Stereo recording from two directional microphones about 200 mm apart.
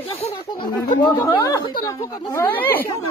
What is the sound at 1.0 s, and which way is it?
Speech, 20° left (ahead or behind).